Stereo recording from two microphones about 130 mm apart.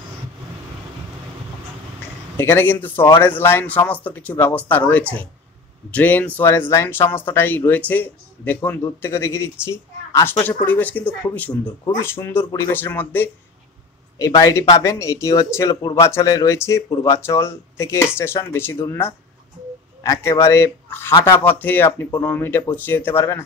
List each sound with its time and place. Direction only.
2.3 s speech: 15° left (ahead or behind)
14.1 s speech: 25° left (ahead or behind)